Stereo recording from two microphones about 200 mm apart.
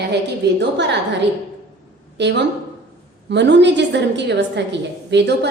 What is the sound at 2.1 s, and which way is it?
A woman's voice, 60° right (ahead or behind).